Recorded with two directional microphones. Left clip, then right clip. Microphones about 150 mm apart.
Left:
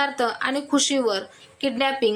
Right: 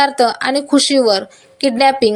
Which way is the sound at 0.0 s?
30° right (ahead or behind).